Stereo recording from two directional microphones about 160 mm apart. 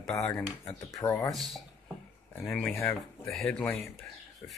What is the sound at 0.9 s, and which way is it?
Speech, 20° left (ahead or behind).